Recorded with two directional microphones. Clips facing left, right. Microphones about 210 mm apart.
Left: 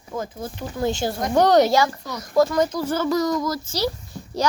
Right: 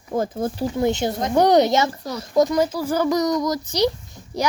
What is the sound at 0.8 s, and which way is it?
A child's voice, 20° right (ahead or behind).